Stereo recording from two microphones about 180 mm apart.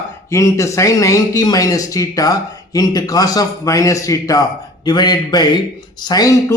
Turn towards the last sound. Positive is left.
turn(degrees=20)  # may be behind; listen again after turning